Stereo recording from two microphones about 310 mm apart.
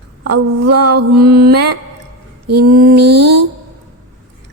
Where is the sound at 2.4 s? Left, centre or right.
Right.